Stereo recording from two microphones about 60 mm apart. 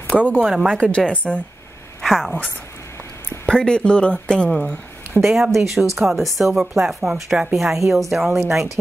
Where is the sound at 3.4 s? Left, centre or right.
Centre.